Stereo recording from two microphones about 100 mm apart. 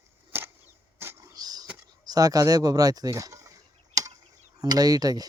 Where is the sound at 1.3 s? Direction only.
40° right (ahead or behind).